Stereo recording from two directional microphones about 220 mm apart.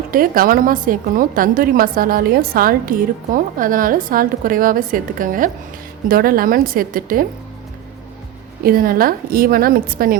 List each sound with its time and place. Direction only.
0.1 s a woman's voice: 40° right (ahead or behind)
8.6 s a woman's voice: 40° right (ahead or behind)